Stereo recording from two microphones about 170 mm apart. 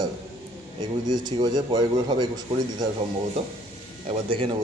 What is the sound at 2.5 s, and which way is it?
Speech, 40° right (ahead or behind).